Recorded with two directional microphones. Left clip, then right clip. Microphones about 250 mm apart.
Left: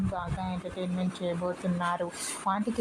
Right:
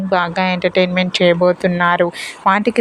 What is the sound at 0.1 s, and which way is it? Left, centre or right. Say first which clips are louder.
A woman's voice: right 19 dB; right.